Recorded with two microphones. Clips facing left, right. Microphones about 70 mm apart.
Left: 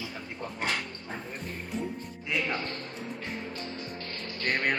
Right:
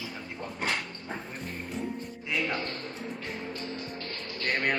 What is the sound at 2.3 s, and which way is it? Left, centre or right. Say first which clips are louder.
Speech: even; centre.